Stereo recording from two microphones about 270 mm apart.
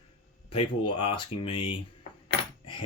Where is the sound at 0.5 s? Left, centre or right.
Centre.